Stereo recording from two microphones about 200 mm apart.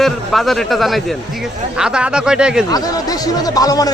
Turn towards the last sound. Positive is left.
turn(degrees=20)  # may be behind; listen again after turning